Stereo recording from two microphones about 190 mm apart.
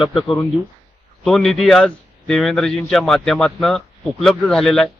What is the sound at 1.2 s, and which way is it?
A man's voice, 5° left (ahead or behind).